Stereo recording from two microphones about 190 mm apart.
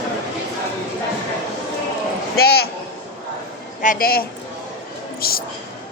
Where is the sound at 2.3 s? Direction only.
55° left (ahead or behind).